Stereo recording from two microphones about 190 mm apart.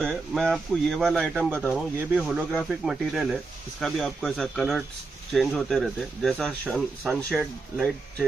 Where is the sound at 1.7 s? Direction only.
10° right (ahead or behind).